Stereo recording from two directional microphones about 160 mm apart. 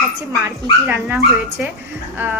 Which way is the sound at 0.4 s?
10° right (ahead or behind).